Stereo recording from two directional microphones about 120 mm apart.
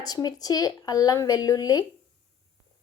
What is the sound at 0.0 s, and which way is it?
Speech, 35° left (ahead or behind).